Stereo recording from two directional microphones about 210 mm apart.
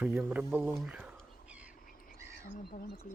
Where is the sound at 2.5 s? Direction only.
40° left (ahead or behind).